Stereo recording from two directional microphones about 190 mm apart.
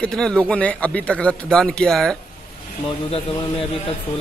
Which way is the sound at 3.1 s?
30° left (ahead or behind).